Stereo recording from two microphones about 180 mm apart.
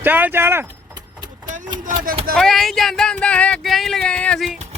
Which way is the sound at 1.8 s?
50° right (ahead or behind).